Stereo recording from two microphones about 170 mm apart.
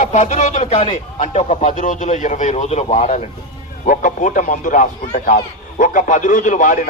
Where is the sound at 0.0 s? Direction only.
45° left (ahead or behind).